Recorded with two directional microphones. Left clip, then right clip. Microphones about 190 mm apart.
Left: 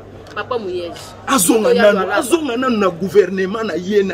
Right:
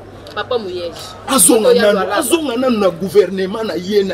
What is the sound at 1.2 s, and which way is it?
Speech, 5° right (ahead or behind).